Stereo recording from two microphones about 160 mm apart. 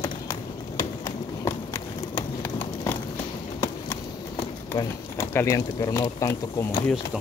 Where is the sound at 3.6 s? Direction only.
20° left (ahead or behind).